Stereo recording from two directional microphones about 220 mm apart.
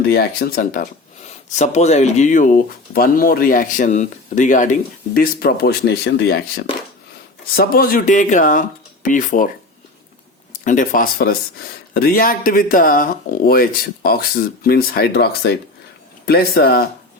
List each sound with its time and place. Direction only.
0.1 s speech: 45° left (ahead or behind)
7.5 s speech: 40° left (ahead or behind)
10.6 s speech: 35° left (ahead or behind)